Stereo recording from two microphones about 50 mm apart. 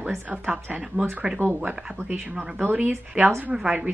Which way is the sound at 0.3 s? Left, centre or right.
Right.